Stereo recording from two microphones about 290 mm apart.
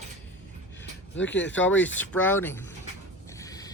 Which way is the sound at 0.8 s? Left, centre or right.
Left.